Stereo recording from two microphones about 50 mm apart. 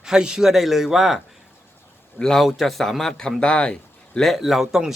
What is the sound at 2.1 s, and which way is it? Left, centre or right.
A man's voice, centre.